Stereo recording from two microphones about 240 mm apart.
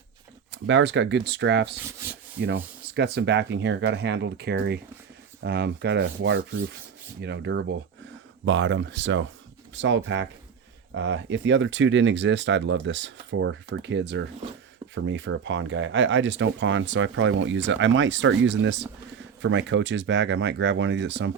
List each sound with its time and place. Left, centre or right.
0.5 s speech: right